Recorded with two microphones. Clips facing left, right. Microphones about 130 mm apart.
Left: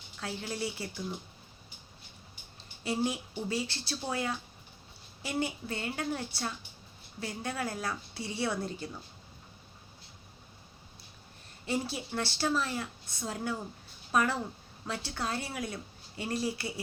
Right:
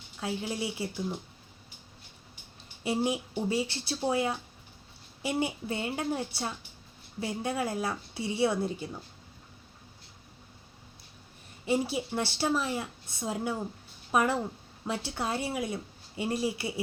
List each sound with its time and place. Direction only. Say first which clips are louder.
0.2 s speech: right 3 dB; 20° right (ahead or behind)
2.8 s speech: right 3 dB; 15° right (ahead or behind)
11.6 s speech: right 5 dB; 15° right (ahead or behind)